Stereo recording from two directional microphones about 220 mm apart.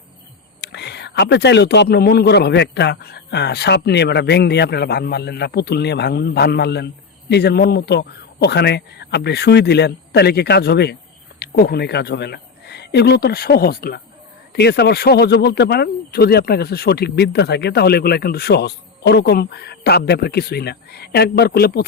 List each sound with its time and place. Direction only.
0.6 s speech: 50° left (ahead or behind)